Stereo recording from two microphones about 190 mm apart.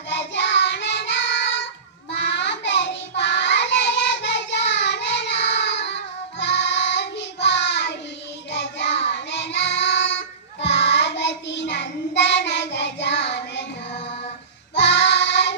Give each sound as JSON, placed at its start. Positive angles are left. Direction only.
{"t": 0.1, "sound": "child singing", "side_deg": 65}
{"t": 14.8, "sound": "child singing", "side_deg": 65}